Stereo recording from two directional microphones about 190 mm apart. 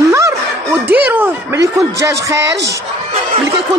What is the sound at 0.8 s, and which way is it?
A woman's voice, 10° right (ahead or behind).